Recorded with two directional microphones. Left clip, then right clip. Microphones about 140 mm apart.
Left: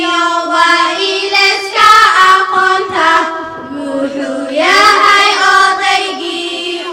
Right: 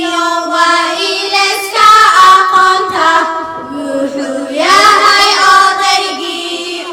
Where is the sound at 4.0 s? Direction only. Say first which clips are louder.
Left 1 dB; centre (ahead or behind).